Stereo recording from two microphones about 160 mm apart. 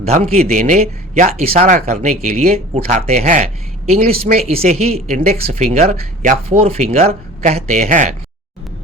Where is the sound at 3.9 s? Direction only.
40° right (ahead or behind).